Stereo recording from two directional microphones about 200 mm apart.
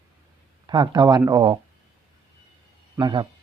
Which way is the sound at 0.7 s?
20° right (ahead or behind).